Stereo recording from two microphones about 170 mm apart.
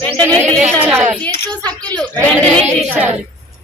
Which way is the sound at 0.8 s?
10° right (ahead or behind).